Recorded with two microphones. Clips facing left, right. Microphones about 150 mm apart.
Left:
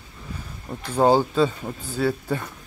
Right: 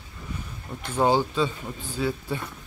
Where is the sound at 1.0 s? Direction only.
40° left (ahead or behind).